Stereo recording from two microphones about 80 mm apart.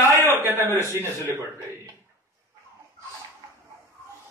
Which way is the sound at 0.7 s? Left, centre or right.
Right.